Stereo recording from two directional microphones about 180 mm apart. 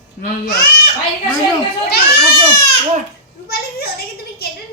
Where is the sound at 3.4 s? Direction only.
60° left (ahead or behind).